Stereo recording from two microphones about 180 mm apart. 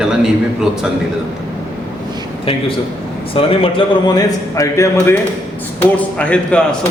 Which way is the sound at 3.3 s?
30° left (ahead or behind).